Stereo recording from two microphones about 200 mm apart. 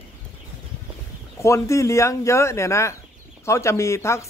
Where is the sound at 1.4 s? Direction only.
15° left (ahead or behind).